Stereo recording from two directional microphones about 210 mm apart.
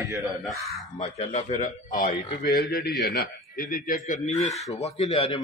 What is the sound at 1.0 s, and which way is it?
A man's voice, 30° left (ahead or behind).